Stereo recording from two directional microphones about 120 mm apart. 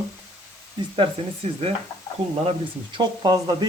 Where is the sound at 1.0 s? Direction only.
55° right (ahead or behind).